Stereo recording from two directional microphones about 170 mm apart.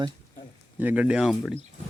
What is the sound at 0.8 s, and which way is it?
Speech, 10° right (ahead or behind).